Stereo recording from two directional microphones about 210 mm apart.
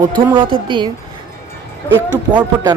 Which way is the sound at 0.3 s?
25° right (ahead or behind).